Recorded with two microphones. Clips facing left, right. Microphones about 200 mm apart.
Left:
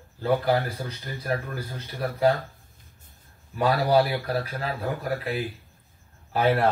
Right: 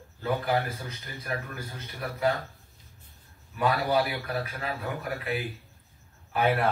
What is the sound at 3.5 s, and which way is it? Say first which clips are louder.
A man's voice: left 4 dB; 35° left (ahead or behind).